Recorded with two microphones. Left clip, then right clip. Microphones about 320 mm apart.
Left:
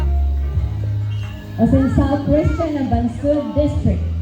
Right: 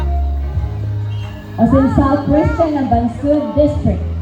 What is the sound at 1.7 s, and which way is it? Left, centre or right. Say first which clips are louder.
Speech: right 6 dB; centre.